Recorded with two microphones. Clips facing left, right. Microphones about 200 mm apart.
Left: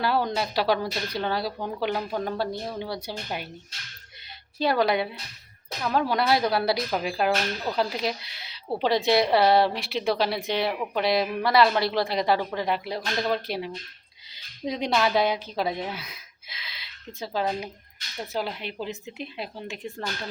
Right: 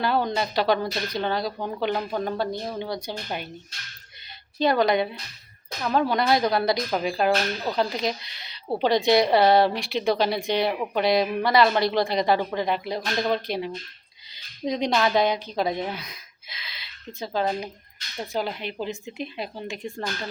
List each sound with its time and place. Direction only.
0.0 s speech: 5° left (ahead or behind)
4.6 s speech: 5° left (ahead or behind)